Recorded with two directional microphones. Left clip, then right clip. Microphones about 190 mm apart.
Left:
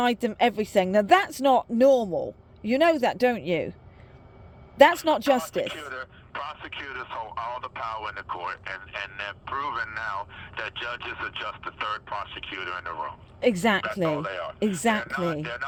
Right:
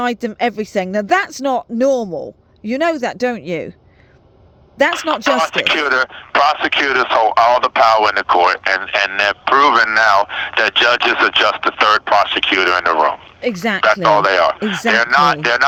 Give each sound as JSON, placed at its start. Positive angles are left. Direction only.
{"t": 0.0, "sound": "a man's voice", "side_deg": -25}
{"t": 4.9, "sound": "a man's voice", "side_deg": -50}
{"t": 13.6, "sound": "speech", "side_deg": -10}
{"t": 13.8, "sound": "a man's voice", "side_deg": -50}